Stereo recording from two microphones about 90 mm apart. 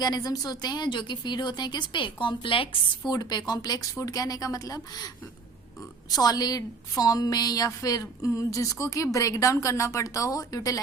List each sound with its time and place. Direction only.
0.0 s a woman's voice: 45° left (ahead or behind); by 2.6 s 75° left (ahead or behind)
3.1 s speech: 50° left (ahead or behind)
6.1 s a woman's voice: 45° left (ahead or behind)